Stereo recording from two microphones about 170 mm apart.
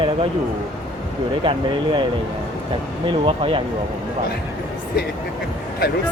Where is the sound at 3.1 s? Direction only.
30° right (ahead or behind).